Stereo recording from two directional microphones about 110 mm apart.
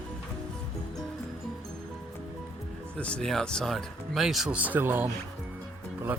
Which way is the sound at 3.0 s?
10° left (ahead or behind).